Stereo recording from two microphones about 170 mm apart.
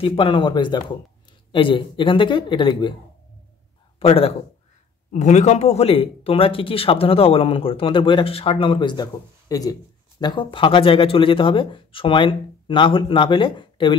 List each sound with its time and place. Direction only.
0.0 s speech: 30° left (ahead or behind)
4.0 s a man's voice: 35° left (ahead or behind)